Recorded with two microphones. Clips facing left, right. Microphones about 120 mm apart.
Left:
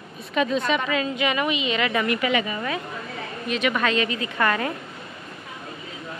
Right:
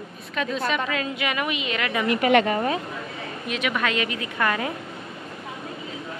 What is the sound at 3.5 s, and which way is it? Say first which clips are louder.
A woman's voice: left 3 dB; 5° right (ahead or behind).